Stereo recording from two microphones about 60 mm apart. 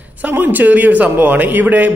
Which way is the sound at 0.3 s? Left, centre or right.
Right.